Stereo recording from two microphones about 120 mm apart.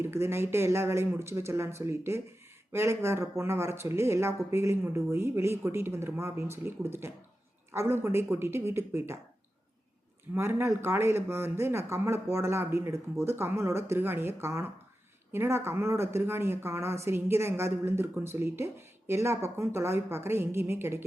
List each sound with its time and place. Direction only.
0.0 s speech: 20° right (ahead or behind)
10.3 s speech: 20° right (ahead or behind)